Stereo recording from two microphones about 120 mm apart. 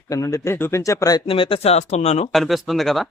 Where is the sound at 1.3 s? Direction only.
50° left (ahead or behind); by 2.3 s 65° left (ahead or behind).